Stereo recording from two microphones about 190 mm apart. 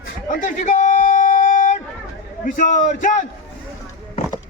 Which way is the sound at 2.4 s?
40° left (ahead or behind).